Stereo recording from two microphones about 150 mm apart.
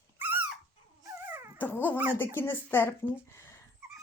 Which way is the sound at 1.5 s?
10° left (ahead or behind).